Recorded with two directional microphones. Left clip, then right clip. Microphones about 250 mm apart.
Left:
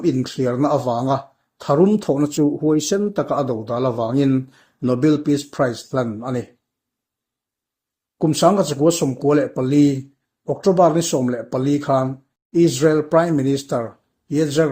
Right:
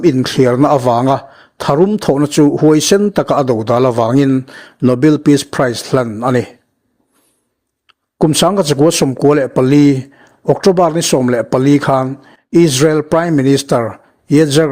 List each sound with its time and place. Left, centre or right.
0.0 s speech: right
8.2 s speech: right